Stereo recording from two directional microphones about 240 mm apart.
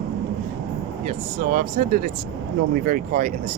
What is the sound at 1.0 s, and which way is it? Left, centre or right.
Speech, right.